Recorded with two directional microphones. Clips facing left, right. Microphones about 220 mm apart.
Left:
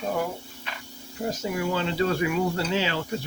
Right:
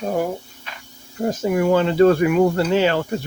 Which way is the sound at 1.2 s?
55° right (ahead or behind).